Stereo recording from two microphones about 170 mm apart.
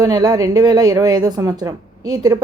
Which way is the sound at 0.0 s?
20° right (ahead or behind).